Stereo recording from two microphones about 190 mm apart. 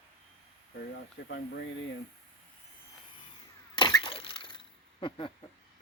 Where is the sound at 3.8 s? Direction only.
25° left (ahead or behind).